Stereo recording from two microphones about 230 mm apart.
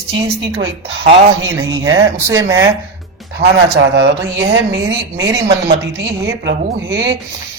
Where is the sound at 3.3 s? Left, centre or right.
Right.